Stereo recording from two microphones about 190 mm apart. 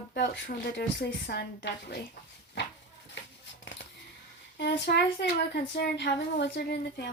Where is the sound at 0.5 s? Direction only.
60° left (ahead or behind).